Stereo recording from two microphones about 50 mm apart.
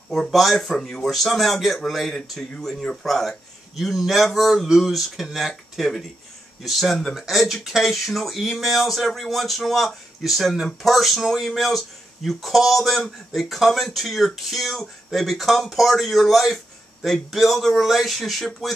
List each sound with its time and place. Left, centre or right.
0.1 s speech: centre